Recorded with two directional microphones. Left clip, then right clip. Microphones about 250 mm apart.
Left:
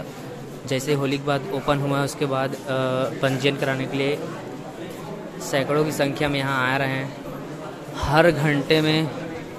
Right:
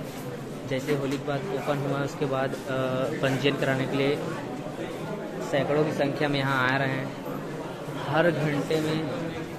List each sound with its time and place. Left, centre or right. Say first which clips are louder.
0.7 s speech: left 5 dB; centre
5.5 s speech: left 3 dB; centre
8.1 s a man's voice: left 6 dB; centre
8.6 s a man's voice: left 10 dB; left